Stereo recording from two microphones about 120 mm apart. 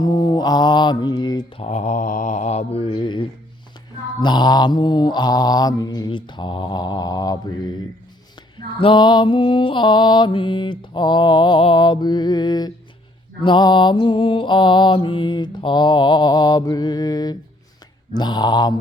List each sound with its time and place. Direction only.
0.0 s mantra: 35° left (ahead or behind)
1.5 s mantra: 70° left (ahead or behind); by 7.3 s 35° left (ahead or behind)
8.5 s mantra: 40° left (ahead or behind)